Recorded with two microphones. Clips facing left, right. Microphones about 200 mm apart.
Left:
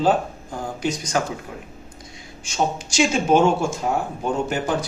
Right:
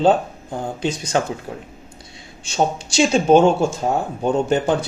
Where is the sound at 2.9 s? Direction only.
35° right (ahead or behind).